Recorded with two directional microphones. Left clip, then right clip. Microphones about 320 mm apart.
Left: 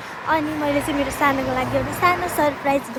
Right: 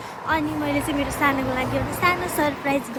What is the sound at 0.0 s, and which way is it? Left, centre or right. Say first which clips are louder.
Speech: left 2 dB; centre.